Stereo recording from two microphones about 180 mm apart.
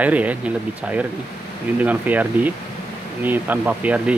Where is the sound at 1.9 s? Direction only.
10° right (ahead or behind).